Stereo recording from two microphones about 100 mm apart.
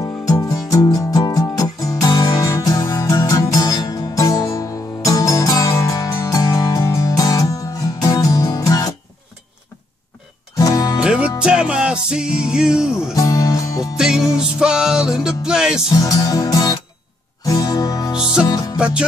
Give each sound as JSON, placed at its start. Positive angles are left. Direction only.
{"t": 0.0, "sound": "music", "side_deg": 35}
{"t": 10.5, "sound": "music", "side_deg": 35}
{"t": 11.0, "sound": "music", "side_deg": -10}
{"t": 13.1, "sound": "music", "side_deg": 35}
{"t": 13.9, "sound": "music", "side_deg": -5}
{"t": 16.0, "sound": "music", "side_deg": 35}